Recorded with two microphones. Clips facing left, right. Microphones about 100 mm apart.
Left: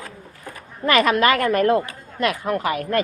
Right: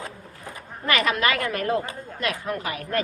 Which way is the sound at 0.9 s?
45° left (ahead or behind).